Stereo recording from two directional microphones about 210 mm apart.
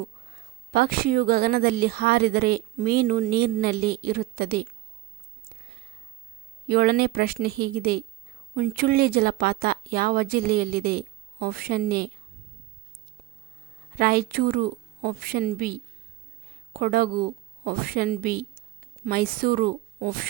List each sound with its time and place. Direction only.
0.7 s speech: 45° right (ahead or behind)
6.7 s speech: 45° right (ahead or behind)
13.9 s a woman's voice: 45° right (ahead or behind)